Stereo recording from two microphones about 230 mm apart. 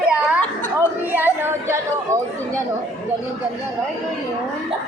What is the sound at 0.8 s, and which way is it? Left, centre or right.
Chatter, centre.